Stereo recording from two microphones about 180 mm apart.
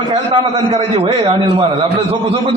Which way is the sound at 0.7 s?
35° right (ahead or behind).